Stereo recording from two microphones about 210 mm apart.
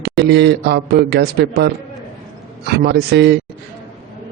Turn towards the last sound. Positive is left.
turn(degrees=-55)  # may be behind; listen again after turning